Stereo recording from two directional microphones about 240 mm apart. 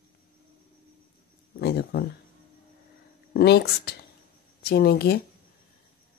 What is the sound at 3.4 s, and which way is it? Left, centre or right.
Speech, left.